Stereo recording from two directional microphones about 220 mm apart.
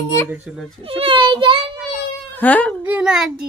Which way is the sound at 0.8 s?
25° right (ahead or behind).